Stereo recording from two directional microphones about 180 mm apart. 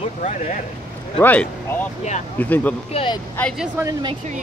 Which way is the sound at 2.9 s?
30° left (ahead or behind).